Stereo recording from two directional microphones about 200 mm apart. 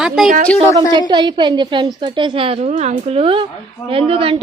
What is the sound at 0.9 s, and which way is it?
A woman's voice, 20° right (ahead or behind).